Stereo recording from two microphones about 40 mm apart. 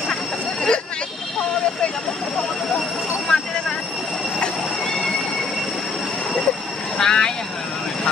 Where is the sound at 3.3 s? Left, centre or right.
Centre.